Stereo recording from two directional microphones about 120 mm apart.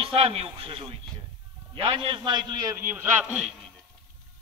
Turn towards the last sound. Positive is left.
turn(degrees=-5)  # may be behind; listen again after turning